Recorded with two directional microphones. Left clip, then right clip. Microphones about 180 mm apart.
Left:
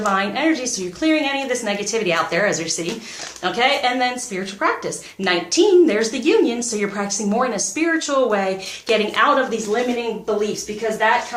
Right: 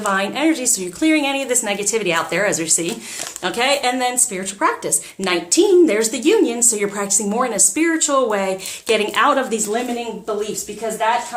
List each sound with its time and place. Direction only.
0.0 s a woman's voice: 40° right (ahead or behind)